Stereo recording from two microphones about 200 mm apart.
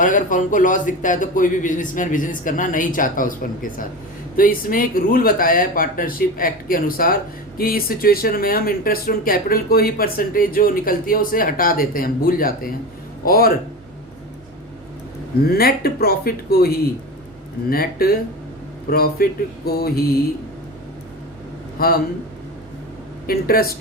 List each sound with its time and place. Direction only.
0.0 s a man's voice: 40° left (ahead or behind)
15.4 s speech: 50° left (ahead or behind)
21.8 s a man's voice: 50° left (ahead or behind)
23.2 s speech: 50° left (ahead or behind)